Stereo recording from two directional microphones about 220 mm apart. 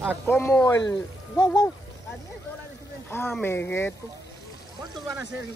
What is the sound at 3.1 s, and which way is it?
Speech, 5° left (ahead or behind).